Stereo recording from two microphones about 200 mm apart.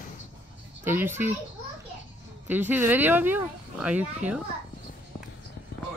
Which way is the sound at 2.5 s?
10° right (ahead or behind).